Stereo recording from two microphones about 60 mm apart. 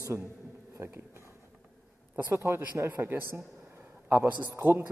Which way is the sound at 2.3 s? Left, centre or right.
Right.